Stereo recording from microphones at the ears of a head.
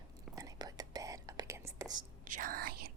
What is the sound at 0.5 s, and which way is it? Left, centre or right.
Whispering, right.